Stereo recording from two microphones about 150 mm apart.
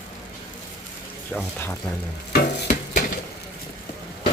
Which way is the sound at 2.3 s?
90° left.